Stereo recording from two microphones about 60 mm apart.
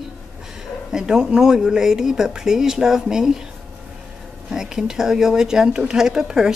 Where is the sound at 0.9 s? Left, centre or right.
Centre.